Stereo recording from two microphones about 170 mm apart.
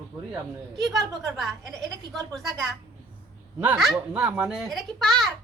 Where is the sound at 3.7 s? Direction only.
Centre (ahead or behind).